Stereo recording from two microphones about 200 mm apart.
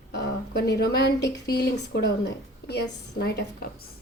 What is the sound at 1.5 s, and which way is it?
A woman's voice, 55° left (ahead or behind).